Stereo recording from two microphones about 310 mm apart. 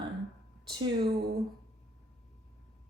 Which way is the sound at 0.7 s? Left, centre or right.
Centre.